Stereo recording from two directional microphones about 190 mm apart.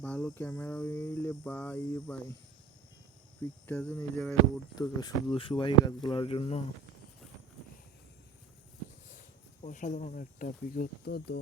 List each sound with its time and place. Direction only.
0.0 s cricket: 5° left (ahead or behind)
3.7 s cricket: 10° left (ahead or behind)
4.7 s speech: 20° left (ahead or behind)
9.6 s speech: 40° left (ahead or behind); by 11.3 s 60° left (ahead or behind)